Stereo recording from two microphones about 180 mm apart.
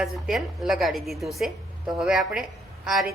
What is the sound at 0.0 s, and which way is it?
A woman's voice, centre (ahead or behind).